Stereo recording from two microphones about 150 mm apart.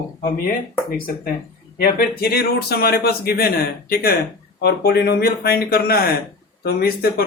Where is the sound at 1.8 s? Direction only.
85° left.